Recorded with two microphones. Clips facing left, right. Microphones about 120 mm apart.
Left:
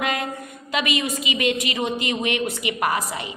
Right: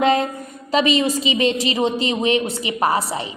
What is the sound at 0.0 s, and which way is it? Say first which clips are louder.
A woman's voice: right 8 dB; 30° right (ahead or behind).